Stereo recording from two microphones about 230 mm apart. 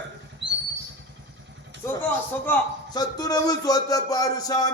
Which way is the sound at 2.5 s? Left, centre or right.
Centre.